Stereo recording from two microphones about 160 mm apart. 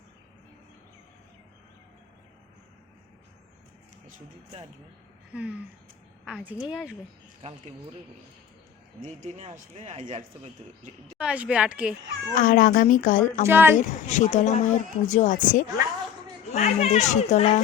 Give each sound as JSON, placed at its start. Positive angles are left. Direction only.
{"t": 5.3, "sound": "a woman's voice", "side_deg": -5}
{"t": 9.0, "sound": "speech", "side_deg": -45}
{"t": 11.2, "sound": "a woman's voice", "side_deg": -5}
{"t": 12.3, "sound": "speech", "side_deg": 55}
{"t": 13.5, "sound": "a woman's voice", "side_deg": -15}
{"t": 13.7, "sound": "speech", "side_deg": 50}
{"t": 16.5, "sound": "speech", "side_deg": 45}